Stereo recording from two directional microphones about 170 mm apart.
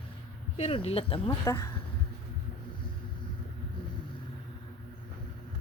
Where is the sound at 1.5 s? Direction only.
15° left (ahead or behind).